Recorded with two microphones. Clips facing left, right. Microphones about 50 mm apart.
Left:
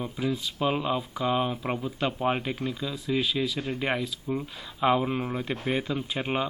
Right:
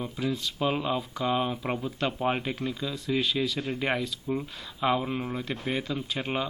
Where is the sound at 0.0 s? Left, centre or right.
Centre.